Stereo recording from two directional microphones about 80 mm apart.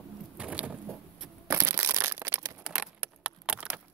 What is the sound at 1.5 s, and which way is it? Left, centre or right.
Crushing, right.